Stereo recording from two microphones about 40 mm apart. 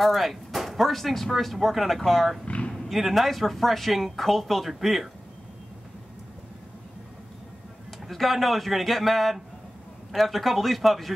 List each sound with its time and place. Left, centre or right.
0.0 s speech: centre
2.4 s a sound: left
3.0 s speech: centre
8.1 s speech: centre